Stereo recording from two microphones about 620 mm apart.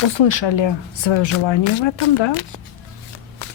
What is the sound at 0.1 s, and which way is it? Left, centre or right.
Speech, left.